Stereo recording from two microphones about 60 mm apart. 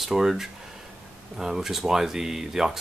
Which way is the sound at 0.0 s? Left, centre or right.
Centre.